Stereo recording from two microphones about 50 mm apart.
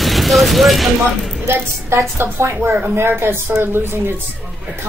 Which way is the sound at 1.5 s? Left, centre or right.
Right.